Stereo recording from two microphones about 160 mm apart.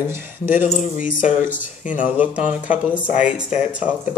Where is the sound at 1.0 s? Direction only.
55° left (ahead or behind).